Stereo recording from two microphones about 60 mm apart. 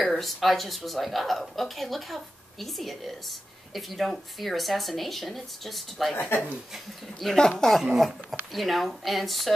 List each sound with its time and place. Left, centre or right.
0.0 s a woman's voice: centre
6.1 s speech: left
6.7 s a woman's voice: centre
7.8 s a woman's voice: centre